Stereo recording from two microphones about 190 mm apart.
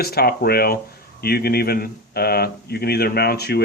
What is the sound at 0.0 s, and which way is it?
Speech, 55° left (ahead or behind).